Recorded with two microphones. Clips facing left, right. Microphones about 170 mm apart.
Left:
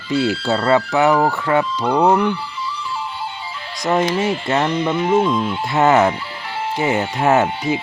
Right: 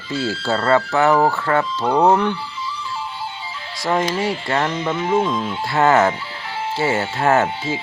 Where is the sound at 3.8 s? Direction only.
20° left (ahead or behind).